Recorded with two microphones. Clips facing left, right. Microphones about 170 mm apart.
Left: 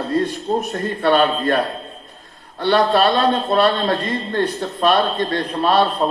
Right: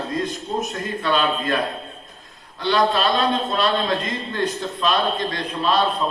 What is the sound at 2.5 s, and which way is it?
A man's voice, 55° left (ahead or behind).